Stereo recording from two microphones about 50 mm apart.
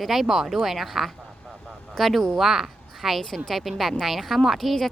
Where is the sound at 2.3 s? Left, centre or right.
Centre.